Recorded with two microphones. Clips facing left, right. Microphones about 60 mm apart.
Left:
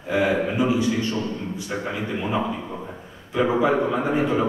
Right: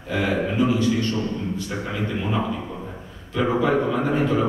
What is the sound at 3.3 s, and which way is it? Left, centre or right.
A man's voice, centre.